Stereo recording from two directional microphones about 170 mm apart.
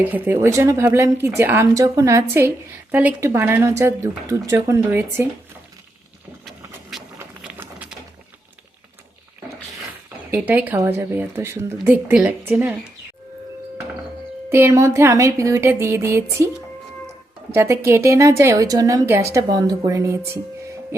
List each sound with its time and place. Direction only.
0.0 s a woman's voice: 10° right (ahead or behind)
7.2 s sewing machine: 10° right (ahead or behind)
10.3 s a woman's voice: 10° right (ahead or behind)
14.5 s a woman's voice: 15° right (ahead or behind)
17.5 s a woman's voice: 15° right (ahead or behind)